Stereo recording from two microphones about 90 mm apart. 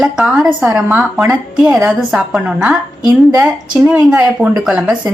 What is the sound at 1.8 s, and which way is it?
A woman's voice, 10° right (ahead or behind).